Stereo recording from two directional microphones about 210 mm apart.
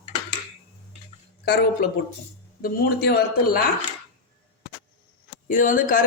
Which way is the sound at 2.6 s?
50° left (ahead or behind).